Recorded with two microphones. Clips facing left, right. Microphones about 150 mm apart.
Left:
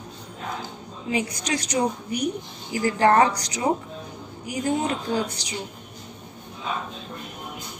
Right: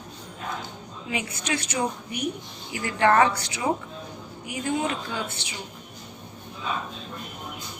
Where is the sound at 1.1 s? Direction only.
35° left (ahead or behind).